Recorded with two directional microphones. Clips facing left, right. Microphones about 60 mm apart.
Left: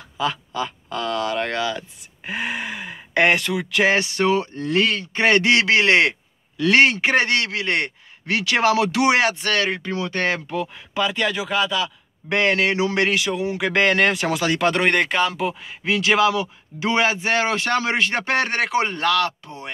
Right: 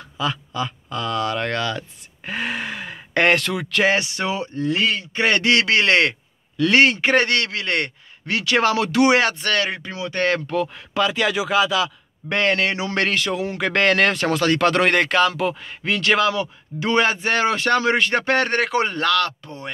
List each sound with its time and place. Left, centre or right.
0.2 s speech: left
2.2 s speech: centre
3.7 s speech: left
4.4 s speech: right
5.1 s speech: left
10.5 s speech: centre
11.2 s speech: centre
12.3 s speech: left
12.9 s speech: centre